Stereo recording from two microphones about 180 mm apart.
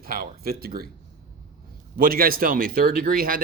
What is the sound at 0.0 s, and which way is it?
Speech, 55° right (ahead or behind).